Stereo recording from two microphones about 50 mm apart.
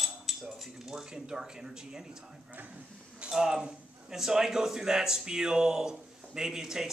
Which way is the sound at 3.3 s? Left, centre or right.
Centre.